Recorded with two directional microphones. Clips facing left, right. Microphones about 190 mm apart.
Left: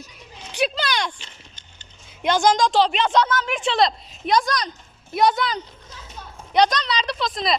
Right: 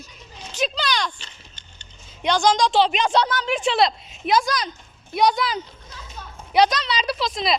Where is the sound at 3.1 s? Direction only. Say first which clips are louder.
Left 1 dB; 30° right (ahead or behind).